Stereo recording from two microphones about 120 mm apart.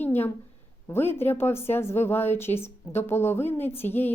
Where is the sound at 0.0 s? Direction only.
15° left (ahead or behind).